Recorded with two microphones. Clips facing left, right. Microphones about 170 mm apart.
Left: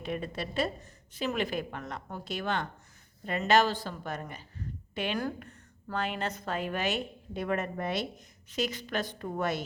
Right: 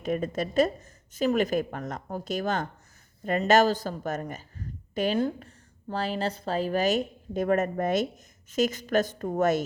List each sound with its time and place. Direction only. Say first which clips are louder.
0.0 s a woman's voice: right 7 dB; 45° right (ahead or behind)
5.1 s a woman's voice: right 6 dB; 30° right (ahead or behind); by 9.6 s 45° right (ahead or behind)